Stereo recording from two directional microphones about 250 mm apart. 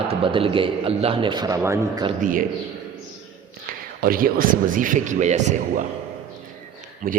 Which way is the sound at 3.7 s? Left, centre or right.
Right.